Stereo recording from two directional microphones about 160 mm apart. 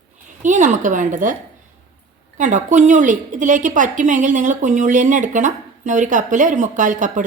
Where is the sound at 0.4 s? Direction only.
50° right (ahead or behind).